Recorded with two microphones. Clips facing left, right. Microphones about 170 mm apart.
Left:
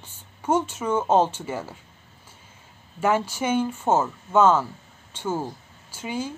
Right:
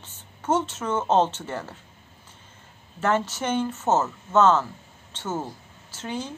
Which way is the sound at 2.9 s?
10° left (ahead or behind).